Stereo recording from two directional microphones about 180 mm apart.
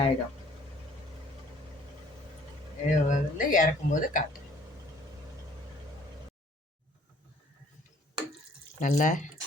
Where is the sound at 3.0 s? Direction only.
45° left (ahead or behind).